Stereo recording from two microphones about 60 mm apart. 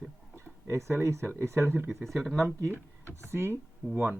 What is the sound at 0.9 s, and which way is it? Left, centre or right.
Speech, right.